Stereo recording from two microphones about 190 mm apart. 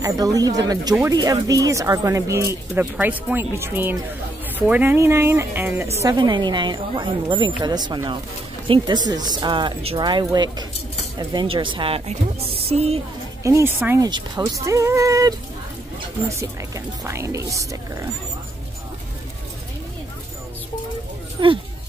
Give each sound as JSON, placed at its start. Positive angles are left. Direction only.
{"t": 0.0, "sound": "a woman's voice", "side_deg": -20}
{"t": 13.4, "sound": "speech", "side_deg": -15}
{"t": 21.4, "sound": "speech", "side_deg": -25}